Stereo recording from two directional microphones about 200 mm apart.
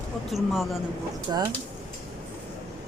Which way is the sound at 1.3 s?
20° right (ahead or behind).